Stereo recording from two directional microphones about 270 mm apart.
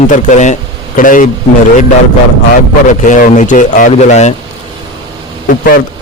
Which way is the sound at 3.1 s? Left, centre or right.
Left.